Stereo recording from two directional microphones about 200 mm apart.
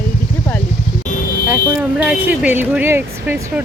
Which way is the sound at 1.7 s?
5° right (ahead or behind).